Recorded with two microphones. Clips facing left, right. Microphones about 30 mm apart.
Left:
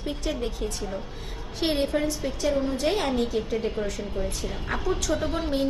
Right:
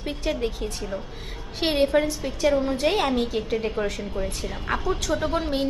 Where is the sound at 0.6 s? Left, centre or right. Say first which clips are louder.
Even; centre.